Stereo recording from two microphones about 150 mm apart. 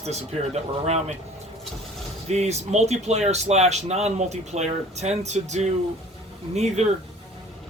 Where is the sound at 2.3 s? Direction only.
45° right (ahead or behind).